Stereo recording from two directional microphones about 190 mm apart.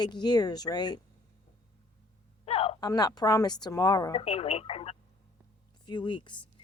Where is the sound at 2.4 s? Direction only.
30° left (ahead or behind).